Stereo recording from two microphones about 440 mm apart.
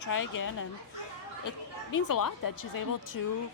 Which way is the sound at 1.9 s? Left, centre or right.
Left.